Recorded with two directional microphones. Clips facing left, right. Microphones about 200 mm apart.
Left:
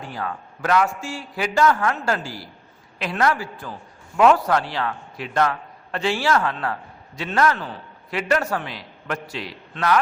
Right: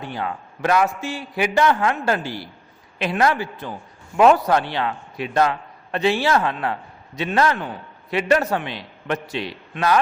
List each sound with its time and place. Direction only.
0.1 s a man's voice: 25° right (ahead or behind)